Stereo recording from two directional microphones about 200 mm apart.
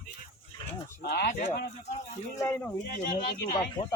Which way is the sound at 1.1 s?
50° left (ahead or behind).